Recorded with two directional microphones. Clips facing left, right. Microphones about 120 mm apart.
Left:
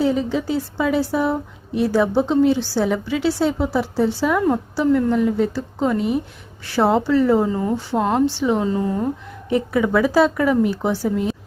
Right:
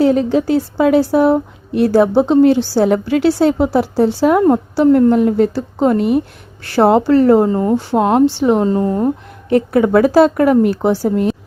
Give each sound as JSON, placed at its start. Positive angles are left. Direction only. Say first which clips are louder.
{"t": 0.0, "sound": "a woman's voice", "louder": "right 7 dB", "side_deg": -65}
{"t": 6.6, "sound": "a woman's voice", "louder": "right 6 dB", "side_deg": -65}
{"t": 7.9, "sound": "speech", "louder": "right 6 dB", "side_deg": -60}
{"t": 9.5, "sound": "a woman's voice", "louder": "right 6 dB", "side_deg": -60}